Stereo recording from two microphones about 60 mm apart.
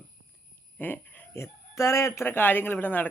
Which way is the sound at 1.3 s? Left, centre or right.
Left.